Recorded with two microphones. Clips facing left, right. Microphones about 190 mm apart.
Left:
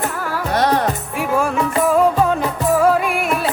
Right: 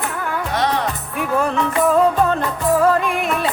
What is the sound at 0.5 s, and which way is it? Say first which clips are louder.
Music: left 4 dB; 45° left (ahead or behind).